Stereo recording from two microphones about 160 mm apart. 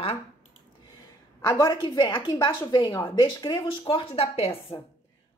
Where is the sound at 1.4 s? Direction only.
20° left (ahead or behind).